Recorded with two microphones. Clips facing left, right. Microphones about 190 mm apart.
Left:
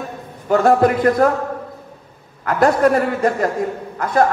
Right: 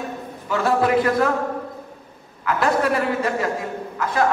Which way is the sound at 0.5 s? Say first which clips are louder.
Left 6 dB; 45° left (ahead or behind).